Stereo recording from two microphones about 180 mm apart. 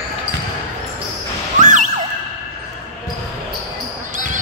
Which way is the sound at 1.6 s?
45° right (ahead or behind).